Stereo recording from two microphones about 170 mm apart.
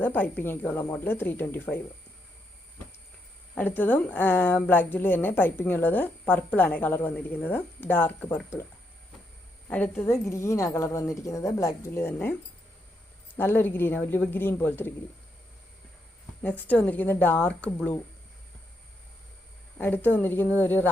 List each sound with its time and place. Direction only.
0.0 s a woman's voice: 10° left (ahead or behind)
3.5 s a woman's voice: 10° left (ahead or behind)
9.6 s a woman's voice: 10° left (ahead or behind)
13.3 s a woman's voice: 10° left (ahead or behind)
16.4 s a woman's voice: 10° left (ahead or behind)
19.8 s a woman's voice: 10° left (ahead or behind)